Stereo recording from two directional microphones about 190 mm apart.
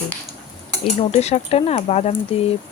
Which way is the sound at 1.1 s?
35° left (ahead or behind).